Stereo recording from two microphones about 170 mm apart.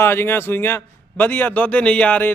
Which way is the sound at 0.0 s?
15° left (ahead or behind).